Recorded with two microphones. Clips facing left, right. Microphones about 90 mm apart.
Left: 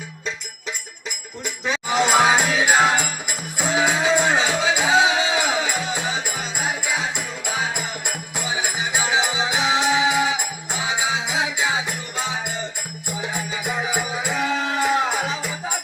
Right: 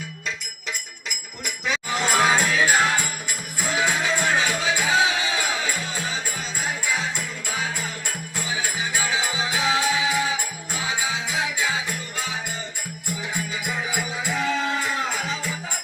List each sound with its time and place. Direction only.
1.6 s music: 25° left (ahead or behind)